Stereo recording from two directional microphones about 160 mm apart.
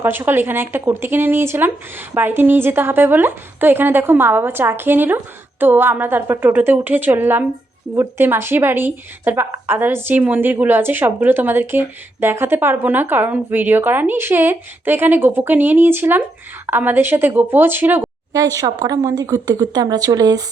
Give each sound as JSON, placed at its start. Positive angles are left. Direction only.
{"t": 0.0, "sound": "speech", "side_deg": -15}
{"t": 18.3, "sound": "a woman's voice", "side_deg": -25}